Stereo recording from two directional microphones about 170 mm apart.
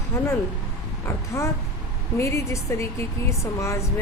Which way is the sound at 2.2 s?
15° left (ahead or behind).